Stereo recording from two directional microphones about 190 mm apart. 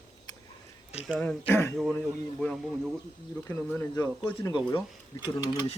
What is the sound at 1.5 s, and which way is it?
Speech, 15° left (ahead or behind).